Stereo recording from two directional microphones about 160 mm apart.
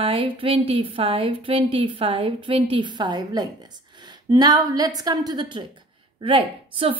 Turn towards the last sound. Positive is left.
turn(degrees=-30)  # may be behind; listen again after turning